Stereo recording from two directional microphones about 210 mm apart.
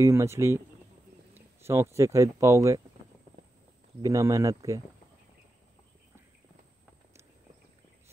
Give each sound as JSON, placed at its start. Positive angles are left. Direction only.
{"t": 0.0, "sound": "speech", "side_deg": -15}
{"t": 4.0, "sound": "speech", "side_deg": -15}